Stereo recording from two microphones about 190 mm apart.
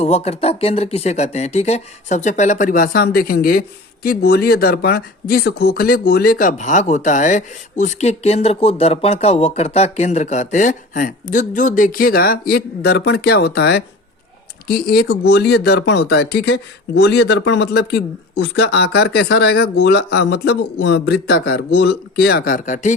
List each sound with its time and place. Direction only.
0.0 s speech: 35° left (ahead or behind)